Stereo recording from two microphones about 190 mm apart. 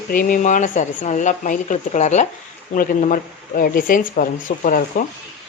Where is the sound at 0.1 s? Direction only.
45° left (ahead or behind).